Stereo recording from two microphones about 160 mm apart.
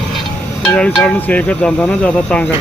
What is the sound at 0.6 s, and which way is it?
Insect, 5° left (ahead or behind).